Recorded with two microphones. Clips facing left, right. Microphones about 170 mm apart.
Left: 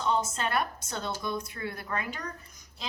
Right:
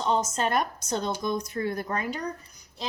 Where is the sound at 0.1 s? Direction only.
40° right (ahead or behind).